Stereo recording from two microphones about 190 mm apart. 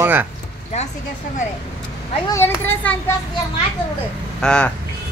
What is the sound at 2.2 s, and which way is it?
Speech, 15° left (ahead or behind).